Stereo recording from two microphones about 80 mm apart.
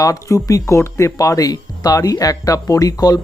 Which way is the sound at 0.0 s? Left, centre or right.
Left.